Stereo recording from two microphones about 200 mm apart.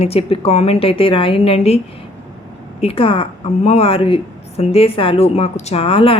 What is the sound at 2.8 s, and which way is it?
A woman's voice, 30° left (ahead or behind).